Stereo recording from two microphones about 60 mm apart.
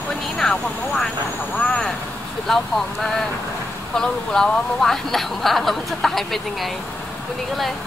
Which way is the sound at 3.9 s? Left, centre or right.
Centre.